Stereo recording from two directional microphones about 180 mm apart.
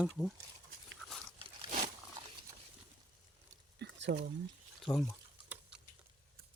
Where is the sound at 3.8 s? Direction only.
75° right (ahead or behind).